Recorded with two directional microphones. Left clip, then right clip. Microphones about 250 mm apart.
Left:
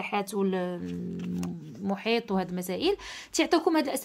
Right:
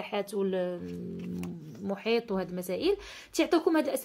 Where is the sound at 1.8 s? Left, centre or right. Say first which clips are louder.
Left 1 dB; centre.